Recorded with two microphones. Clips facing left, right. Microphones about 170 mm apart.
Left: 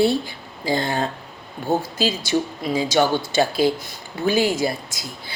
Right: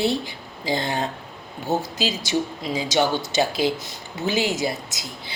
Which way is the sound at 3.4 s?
20° right (ahead or behind).